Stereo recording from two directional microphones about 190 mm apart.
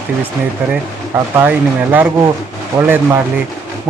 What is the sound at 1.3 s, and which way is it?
Speech, 10° right (ahead or behind).